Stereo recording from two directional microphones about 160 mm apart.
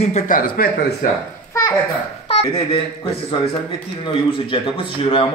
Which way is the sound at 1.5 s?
20° left (ahead or behind).